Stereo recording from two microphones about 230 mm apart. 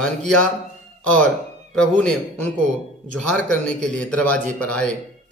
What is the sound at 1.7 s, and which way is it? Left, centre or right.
Speech, centre.